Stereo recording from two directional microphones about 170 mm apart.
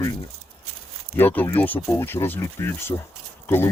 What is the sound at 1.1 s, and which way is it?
Speech, 10° left (ahead or behind).